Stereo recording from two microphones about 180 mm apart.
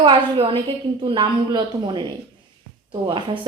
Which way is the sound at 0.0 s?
30° right (ahead or behind).